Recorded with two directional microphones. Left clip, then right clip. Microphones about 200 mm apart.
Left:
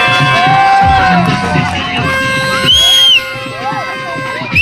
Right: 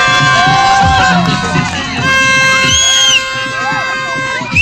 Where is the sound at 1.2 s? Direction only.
30° left (ahead or behind).